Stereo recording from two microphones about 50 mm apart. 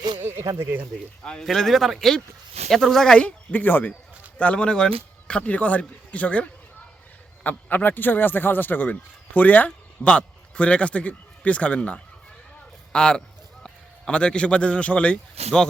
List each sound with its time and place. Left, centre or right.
0.2 s speech: right
1.2 s speech: centre
1.5 s speech: centre
3.2 s speech: left
4.4 s speech: left
7.4 s speech: left
9.6 s a man's voice: left